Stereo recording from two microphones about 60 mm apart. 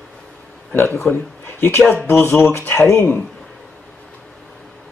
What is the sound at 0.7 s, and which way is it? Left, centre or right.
Speech, left.